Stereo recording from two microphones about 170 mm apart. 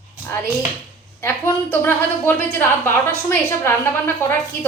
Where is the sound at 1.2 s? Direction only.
15° left (ahead or behind).